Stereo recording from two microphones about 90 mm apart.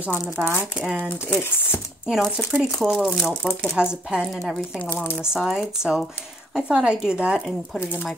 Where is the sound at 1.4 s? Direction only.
25° left (ahead or behind).